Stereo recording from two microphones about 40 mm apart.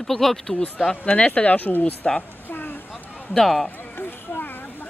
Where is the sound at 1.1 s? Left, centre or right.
Left.